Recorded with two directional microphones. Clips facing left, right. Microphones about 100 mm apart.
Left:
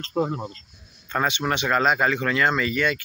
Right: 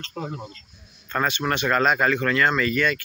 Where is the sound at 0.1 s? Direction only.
40° left (ahead or behind).